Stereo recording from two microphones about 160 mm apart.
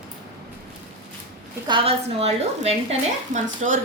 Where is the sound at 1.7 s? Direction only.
40° right (ahead or behind).